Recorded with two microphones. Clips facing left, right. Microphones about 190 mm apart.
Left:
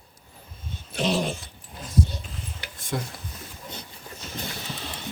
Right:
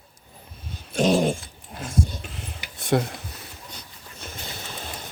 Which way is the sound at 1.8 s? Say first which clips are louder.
Even; 80° right.